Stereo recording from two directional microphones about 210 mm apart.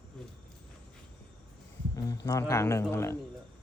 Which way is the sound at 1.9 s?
15° left (ahead or behind).